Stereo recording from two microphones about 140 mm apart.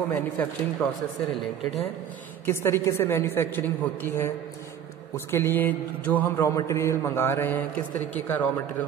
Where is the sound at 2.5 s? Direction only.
20° left (ahead or behind).